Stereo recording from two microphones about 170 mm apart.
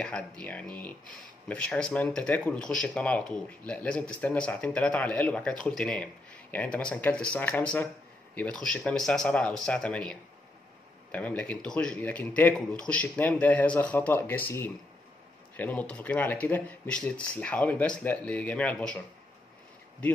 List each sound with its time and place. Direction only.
0.0 s speech: 5° left (ahead or behind)